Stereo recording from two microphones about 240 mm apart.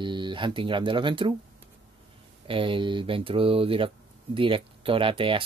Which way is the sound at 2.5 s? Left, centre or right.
Right.